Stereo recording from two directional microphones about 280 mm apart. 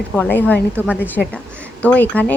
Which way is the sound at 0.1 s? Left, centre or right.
Centre.